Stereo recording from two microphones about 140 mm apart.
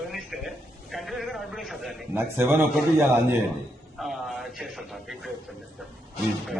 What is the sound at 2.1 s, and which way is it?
Speech, 15° right (ahead or behind).